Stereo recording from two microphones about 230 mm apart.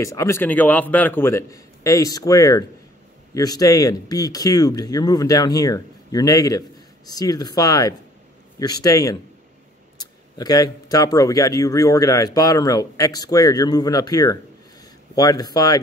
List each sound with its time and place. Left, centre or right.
0.0 s speech: centre